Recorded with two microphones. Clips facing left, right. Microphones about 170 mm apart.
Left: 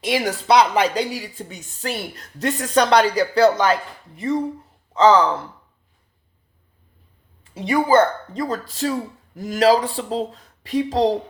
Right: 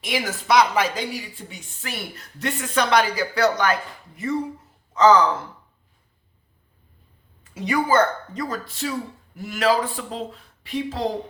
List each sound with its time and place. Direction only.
0.0 s speech: 35° left (ahead or behind)
4.9 s speech: 30° left (ahead or behind)
7.5 s speech: 30° left (ahead or behind)